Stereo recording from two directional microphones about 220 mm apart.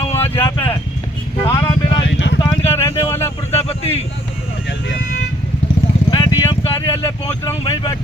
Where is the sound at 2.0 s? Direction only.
55° left (ahead or behind).